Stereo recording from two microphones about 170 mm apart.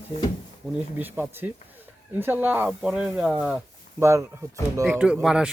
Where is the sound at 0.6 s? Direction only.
5° right (ahead or behind).